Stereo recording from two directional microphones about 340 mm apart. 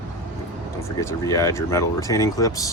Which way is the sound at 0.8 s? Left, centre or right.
Centre.